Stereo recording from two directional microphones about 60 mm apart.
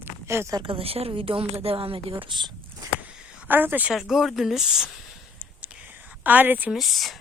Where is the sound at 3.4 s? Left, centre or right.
Right.